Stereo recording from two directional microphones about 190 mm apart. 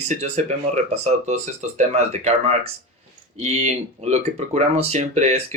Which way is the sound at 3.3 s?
35° right (ahead or behind).